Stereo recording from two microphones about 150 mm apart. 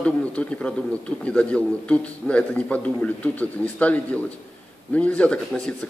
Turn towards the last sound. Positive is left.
turn(degrees=5)  # may be behind; listen again after turning